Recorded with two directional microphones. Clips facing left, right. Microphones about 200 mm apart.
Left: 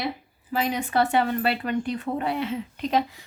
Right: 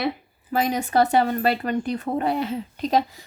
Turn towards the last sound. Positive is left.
turn(degrees=-40)  # may be behind; listen again after turning